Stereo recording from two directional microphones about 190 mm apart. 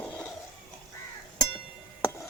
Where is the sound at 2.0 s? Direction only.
15° left (ahead or behind).